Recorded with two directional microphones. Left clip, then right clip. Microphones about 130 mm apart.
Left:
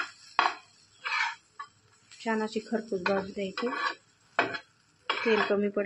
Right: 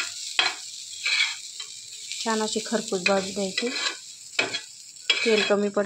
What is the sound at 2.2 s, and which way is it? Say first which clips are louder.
Speech: right 4 dB; 20° right (ahead or behind).